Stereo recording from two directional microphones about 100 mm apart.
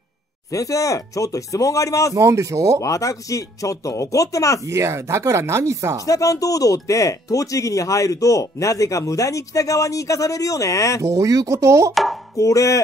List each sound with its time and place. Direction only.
0.5 s speech: 35° left (ahead or behind)
2.1 s speech: 30° right (ahead or behind)
2.8 s speech: 35° left (ahead or behind)
4.6 s speech: 30° right (ahead or behind)
6.0 s speech: 30° left (ahead or behind)
11.0 s speech: 30° right (ahead or behind)
11.9 s chopping: centre (ahead or behind)
12.4 s speech: 35° left (ahead or behind)